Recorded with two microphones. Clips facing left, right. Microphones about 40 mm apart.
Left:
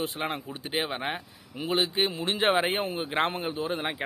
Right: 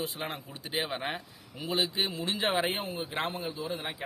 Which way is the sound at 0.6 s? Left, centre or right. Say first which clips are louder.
Left 2 dB; left.